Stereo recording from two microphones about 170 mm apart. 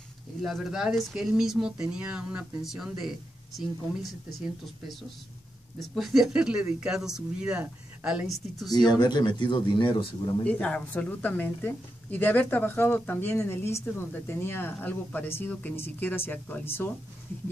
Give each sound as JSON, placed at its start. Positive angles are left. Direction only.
{"t": 0.4, "sound": "speech", "side_deg": 0}
{"t": 5.8, "sound": "speech", "side_deg": 0}
{"t": 8.7, "sound": "speech", "side_deg": 25}
{"t": 10.4, "sound": "a woman's voice", "side_deg": 10}